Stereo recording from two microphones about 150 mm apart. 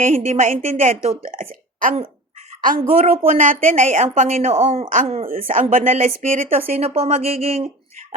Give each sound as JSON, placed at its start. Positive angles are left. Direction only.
{"t": 0.0, "sound": "a woman's voice", "side_deg": -60}
{"t": 3.0, "sound": "speech", "side_deg": -40}
{"t": 3.2, "sound": "a woman's voice", "side_deg": -65}
{"t": 5.3, "sound": "a woman's voice", "side_deg": -65}
{"t": 6.6, "sound": "a woman's voice", "side_deg": -45}